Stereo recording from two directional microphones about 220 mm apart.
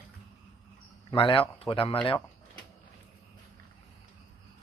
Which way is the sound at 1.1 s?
25° left (ahead or behind).